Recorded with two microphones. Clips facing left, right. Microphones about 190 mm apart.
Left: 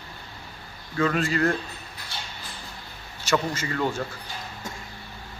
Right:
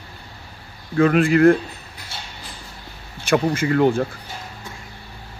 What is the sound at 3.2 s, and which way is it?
Speech, 55° right (ahead or behind).